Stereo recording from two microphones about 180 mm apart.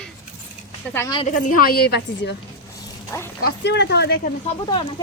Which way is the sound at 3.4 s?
70° left (ahead or behind).